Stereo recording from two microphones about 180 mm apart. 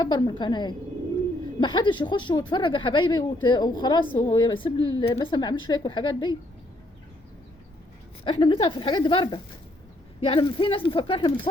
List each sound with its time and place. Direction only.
0.0 s speech: 25° left (ahead or behind)
8.2 s speech: 25° left (ahead or behind)